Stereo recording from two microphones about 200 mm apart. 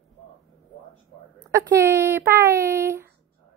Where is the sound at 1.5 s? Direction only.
15° right (ahead or behind).